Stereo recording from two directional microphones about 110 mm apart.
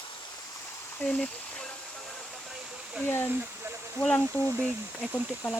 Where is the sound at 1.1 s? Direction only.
5° left (ahead or behind).